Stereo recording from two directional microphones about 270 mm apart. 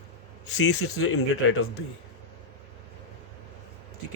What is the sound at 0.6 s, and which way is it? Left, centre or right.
Speech, left.